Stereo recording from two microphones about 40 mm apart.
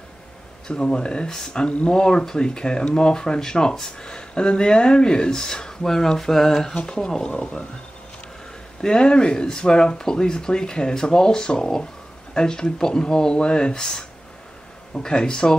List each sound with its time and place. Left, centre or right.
0.7 s speech: left
1.7 s speech: left
2.0 s speech: centre
6.7 s speech: left
8.8 s speech: left